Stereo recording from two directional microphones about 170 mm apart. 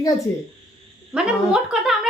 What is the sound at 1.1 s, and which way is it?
Speech, 5° right (ahead or behind).